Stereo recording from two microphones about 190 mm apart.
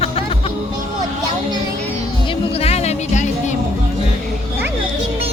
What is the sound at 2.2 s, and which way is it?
Music, 30° left (ahead or behind).